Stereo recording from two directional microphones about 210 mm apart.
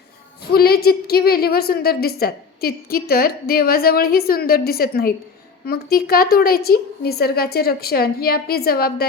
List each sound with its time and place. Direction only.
0.5 s a woman's voice: 45° left (ahead or behind)